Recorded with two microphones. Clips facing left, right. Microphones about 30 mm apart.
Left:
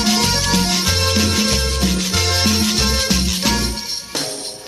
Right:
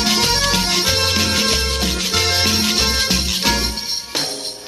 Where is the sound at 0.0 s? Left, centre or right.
Centre.